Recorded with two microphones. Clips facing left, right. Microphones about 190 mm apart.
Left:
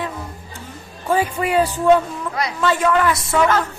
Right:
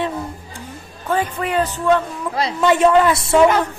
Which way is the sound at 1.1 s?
10° left (ahead or behind).